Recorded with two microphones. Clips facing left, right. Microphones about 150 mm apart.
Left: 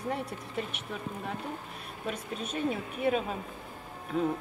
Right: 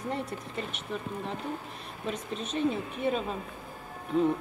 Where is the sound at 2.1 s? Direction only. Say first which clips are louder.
Right 2 dB; 10° left (ahead or behind).